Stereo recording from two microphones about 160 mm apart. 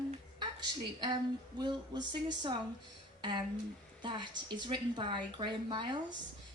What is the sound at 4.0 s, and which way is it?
A woman's voice, 30° right (ahead or behind).